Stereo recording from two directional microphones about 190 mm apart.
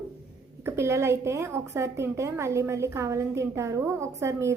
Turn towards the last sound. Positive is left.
turn(degrees=-15)  # may be behind; listen again after turning